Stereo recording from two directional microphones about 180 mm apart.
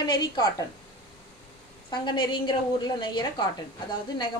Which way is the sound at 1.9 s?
25° left (ahead or behind).